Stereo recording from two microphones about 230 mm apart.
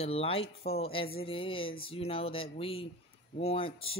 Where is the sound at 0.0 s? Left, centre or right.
Left.